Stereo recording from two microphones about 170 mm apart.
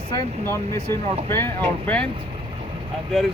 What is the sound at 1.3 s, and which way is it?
Speech, 15° left (ahead or behind).